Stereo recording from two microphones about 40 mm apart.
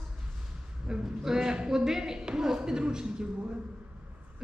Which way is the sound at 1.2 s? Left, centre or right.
Centre.